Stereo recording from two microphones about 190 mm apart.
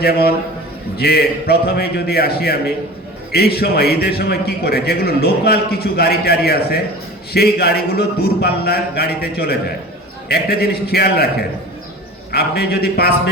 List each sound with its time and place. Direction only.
0.0 s a man's voice: 55° left (ahead or behind)